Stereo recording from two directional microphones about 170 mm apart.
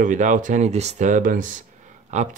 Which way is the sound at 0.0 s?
45° right (ahead or behind).